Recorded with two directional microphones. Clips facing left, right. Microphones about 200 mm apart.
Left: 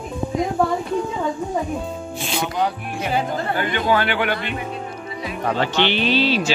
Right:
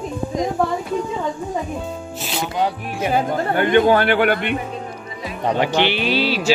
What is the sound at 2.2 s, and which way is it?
Speech, centre (ahead or behind).